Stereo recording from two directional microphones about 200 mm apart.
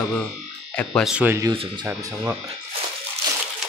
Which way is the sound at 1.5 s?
20° right (ahead or behind).